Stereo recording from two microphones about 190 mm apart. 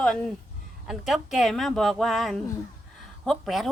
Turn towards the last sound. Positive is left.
turn(degrees=0)  # may be behind; listen again after turning